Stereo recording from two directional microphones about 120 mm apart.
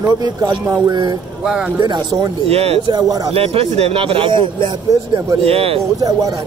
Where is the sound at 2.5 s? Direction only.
55° right (ahead or behind).